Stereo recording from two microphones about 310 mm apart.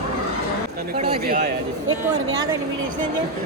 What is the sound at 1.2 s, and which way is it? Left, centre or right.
Speech, right.